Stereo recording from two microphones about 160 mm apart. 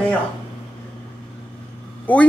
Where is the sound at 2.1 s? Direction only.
10° left (ahead or behind).